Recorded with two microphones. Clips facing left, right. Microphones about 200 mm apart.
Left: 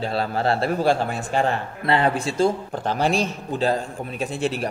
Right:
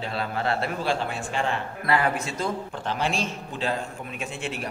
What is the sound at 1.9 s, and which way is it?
A man's voice, 30° left (ahead or behind).